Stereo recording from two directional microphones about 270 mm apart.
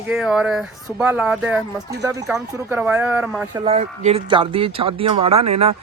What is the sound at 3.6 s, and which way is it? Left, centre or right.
Speech, right.